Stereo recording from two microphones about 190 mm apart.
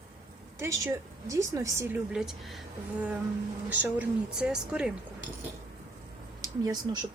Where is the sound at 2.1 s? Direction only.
Centre (ahead or behind).